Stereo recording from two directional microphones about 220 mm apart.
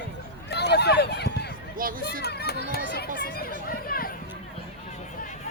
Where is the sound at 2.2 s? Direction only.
45° left (ahead or behind).